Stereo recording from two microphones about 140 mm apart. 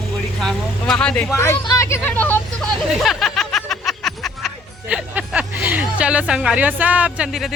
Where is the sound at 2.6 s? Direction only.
Centre (ahead or behind).